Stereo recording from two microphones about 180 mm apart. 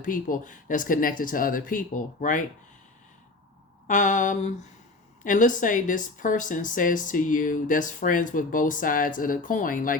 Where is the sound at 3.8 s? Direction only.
45° left (ahead or behind).